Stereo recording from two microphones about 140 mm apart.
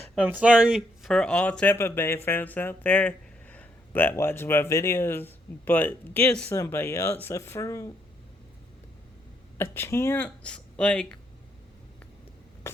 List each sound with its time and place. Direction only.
0.2 s speech: 10° right (ahead or behind); by 7.9 s 20° left (ahead or behind)
9.6 s speech: 15° left (ahead or behind)
12.7 s a sound: 20° left (ahead or behind)